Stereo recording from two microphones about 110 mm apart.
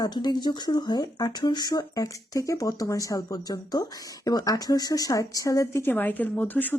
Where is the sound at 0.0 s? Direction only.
40° left (ahead or behind).